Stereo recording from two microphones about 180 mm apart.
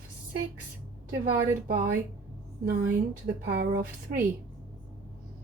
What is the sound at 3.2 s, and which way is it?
Speech, 60° right (ahead or behind).